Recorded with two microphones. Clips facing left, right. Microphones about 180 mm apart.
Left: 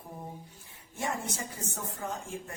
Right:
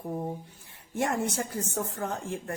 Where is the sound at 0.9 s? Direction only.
65° right (ahead or behind).